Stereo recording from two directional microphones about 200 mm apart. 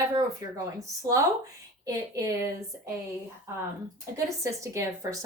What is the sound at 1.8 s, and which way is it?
Speech, 15° right (ahead or behind).